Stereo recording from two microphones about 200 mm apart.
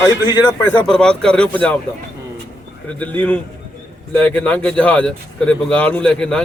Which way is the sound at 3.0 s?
5° left (ahead or behind).